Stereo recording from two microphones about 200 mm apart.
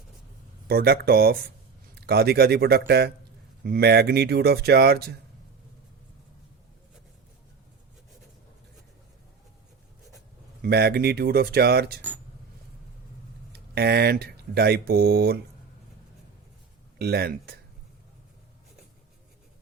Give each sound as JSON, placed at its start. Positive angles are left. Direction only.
{"t": 0.7, "sound": "speech", "side_deg": -50}
{"t": 10.6, "sound": "speech", "side_deg": -55}
{"t": 13.5, "sound": "speech", "side_deg": -55}
{"t": 17.0, "sound": "speech", "side_deg": -50}